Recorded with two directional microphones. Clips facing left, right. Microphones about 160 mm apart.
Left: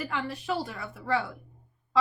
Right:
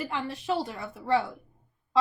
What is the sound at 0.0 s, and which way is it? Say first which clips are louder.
Speech: even; 25° right (ahead or behind).